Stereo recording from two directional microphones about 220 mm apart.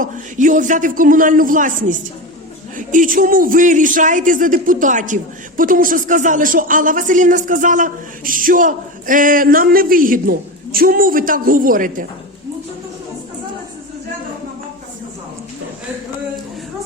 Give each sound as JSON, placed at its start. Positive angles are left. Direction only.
{"t": 0.0, "sound": "a man's voice", "side_deg": -35}